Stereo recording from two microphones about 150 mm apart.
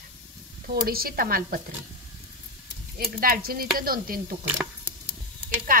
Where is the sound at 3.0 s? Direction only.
80° right.